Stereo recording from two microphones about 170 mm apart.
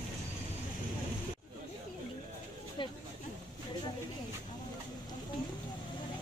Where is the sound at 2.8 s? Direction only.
30° left (ahead or behind).